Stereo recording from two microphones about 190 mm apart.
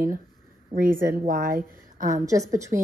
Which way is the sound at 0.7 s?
50° right (ahead or behind).